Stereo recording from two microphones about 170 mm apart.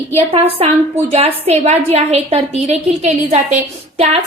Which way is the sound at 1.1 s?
40° right (ahead or behind).